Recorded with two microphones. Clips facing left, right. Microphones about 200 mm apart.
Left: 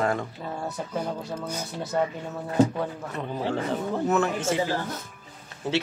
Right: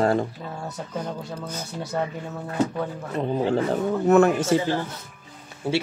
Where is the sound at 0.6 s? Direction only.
5° left (ahead or behind).